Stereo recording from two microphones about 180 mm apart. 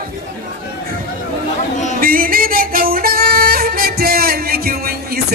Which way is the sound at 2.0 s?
50° right (ahead or behind).